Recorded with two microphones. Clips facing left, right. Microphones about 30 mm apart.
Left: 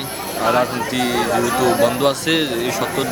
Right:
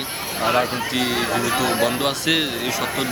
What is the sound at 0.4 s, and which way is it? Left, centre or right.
Speech, centre.